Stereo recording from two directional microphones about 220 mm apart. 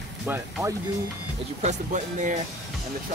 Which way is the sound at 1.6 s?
35° right (ahead or behind).